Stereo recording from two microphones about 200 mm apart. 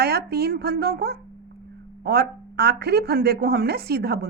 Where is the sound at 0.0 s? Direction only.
55° right (ahead or behind).